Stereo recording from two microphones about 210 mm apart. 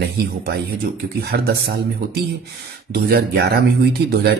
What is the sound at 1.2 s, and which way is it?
Speech, 50° right (ahead or behind).